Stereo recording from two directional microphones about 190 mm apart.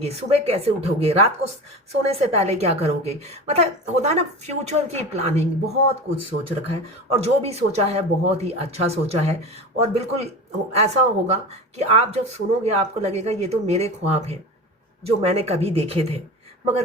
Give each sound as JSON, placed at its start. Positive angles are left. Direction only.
{"t": 0.0, "sound": "a woman's voice", "side_deg": -30}